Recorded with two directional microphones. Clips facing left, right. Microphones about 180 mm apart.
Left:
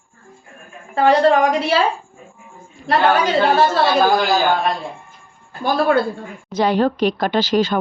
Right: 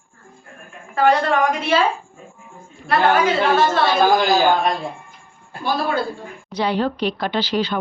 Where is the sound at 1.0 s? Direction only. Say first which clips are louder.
Left 3 dB; 35° left (ahead or behind).